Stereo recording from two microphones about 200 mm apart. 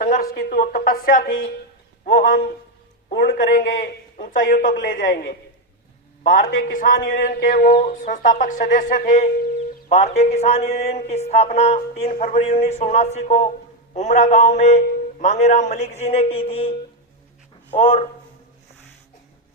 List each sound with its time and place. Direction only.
0.0 s a man's voice: 45° left (ahead or behind)
6.5 s speech: 75° left (ahead or behind)
7.1 s music: 45° left (ahead or behind); by 16.7 s 30° left (ahead or behind)
17.7 s speech: 30° left (ahead or behind)